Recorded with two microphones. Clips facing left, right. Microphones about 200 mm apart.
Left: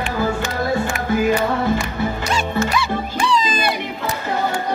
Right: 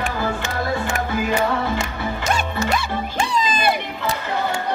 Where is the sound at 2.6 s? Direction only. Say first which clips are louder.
Left 2 dB; 45° right (ahead or behind).